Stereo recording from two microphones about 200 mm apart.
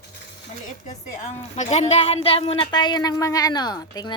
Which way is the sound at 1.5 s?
35° left (ahead or behind).